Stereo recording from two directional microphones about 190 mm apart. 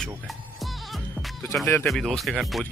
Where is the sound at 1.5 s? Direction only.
15° left (ahead or behind).